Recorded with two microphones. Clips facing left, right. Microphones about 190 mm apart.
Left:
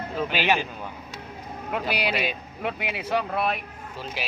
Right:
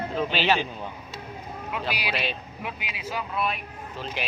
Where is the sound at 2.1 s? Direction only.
10° left (ahead or behind).